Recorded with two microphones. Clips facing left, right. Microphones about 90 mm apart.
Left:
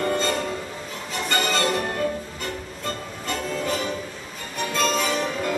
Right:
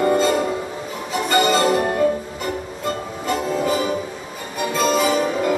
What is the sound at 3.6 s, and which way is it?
Music, 10° right (ahead or behind).